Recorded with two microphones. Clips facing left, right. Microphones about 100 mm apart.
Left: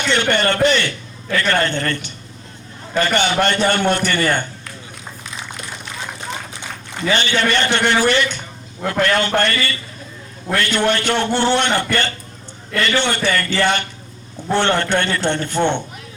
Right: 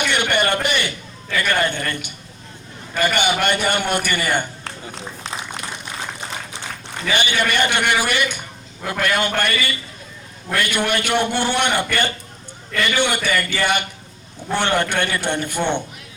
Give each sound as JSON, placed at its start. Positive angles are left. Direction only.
{"t": 0.0, "sound": "a sound", "side_deg": -15}
{"t": 1.4, "sound": "a man's voice", "side_deg": -10}
{"t": 4.6, "sound": "run", "side_deg": -30}
{"t": 7.1, "sound": "a man's voice", "side_deg": -15}